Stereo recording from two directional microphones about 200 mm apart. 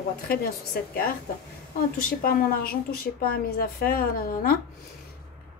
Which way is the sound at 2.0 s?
50° left (ahead or behind).